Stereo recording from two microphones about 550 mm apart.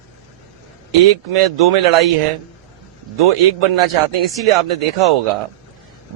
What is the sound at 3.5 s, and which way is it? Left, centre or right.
A man's voice, right.